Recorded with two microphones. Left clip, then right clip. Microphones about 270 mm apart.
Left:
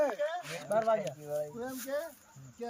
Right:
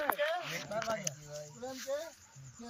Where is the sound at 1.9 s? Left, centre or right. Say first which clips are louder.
Left 2 dB; centre.